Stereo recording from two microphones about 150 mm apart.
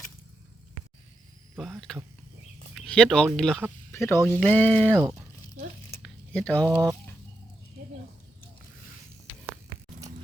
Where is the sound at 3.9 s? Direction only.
15° left (ahead or behind).